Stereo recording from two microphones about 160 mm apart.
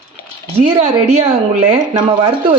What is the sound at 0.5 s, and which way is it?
Speech, 40° right (ahead or behind).